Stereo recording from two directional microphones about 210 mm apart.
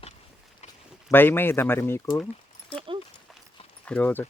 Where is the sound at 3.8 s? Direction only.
5° left (ahead or behind).